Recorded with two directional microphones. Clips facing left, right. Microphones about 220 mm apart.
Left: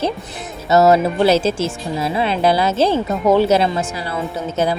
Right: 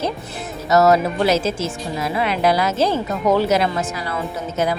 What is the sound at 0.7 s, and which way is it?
Speech, 25° left (ahead or behind).